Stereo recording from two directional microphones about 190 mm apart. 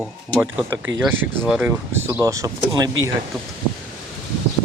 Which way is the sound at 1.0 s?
5° right (ahead or behind).